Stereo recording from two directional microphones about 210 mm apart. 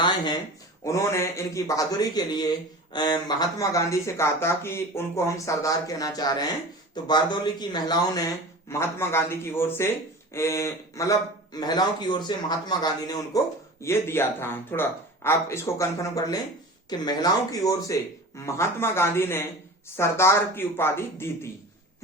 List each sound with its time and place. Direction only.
0.9 s a man's voice: 15° left (ahead or behind)